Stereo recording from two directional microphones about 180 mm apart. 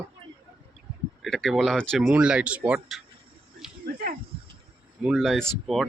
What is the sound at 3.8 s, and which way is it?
Speech, 55° right (ahead or behind).